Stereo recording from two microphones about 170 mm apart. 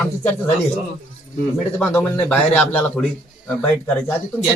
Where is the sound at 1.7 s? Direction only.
5° left (ahead or behind).